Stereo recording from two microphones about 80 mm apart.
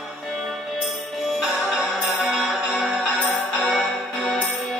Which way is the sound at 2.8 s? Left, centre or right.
Centre.